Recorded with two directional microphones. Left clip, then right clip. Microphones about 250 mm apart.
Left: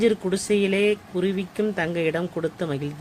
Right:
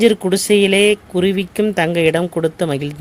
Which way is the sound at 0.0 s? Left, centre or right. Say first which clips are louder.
Right 8 dB; right.